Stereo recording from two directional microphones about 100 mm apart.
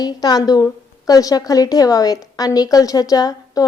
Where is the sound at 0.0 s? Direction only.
40° left (ahead or behind).